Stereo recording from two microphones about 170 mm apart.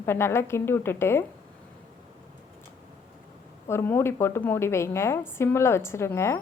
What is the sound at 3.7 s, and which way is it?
A woman's voice, 15° left (ahead or behind).